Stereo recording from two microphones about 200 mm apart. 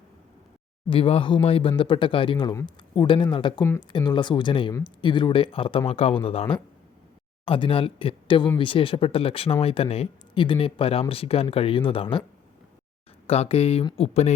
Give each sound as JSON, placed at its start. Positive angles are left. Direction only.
{"t": 0.9, "sound": "speech", "side_deg": 25}
{"t": 3.6, "sound": "speech", "side_deg": 10}
{"t": 3.9, "sound": "speech", "side_deg": 25}
{"t": 13.2, "sound": "speech", "side_deg": 30}